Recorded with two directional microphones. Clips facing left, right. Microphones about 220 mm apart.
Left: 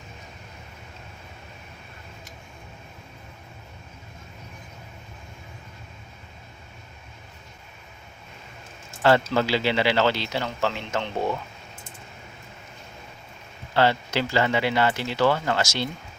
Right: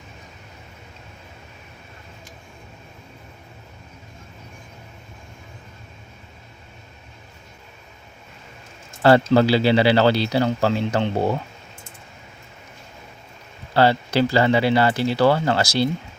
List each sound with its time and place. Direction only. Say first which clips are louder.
9.3 s speech: right 7 dB; 35° right (ahead or behind)
13.7 s speech: right 5 dB; 35° right (ahead or behind)